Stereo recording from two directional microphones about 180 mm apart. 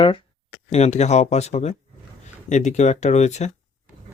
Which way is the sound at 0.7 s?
40° left (ahead or behind).